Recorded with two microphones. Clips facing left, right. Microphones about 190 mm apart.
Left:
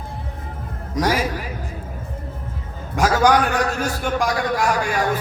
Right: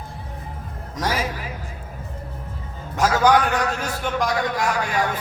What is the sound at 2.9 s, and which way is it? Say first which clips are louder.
A man's voice: left 1 dB; 45° left (ahead or behind).